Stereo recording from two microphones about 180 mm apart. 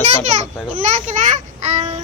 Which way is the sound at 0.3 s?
40° right (ahead or behind).